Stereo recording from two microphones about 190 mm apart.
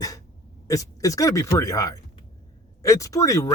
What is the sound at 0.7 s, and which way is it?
Speech, 15° left (ahead or behind).